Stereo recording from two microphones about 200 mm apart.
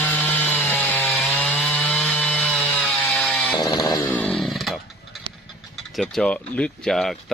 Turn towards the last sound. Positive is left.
turn(degrees=0)  # may be behind; listen again after turning